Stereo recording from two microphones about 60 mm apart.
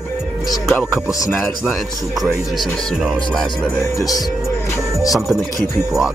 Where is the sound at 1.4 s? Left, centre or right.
Centre.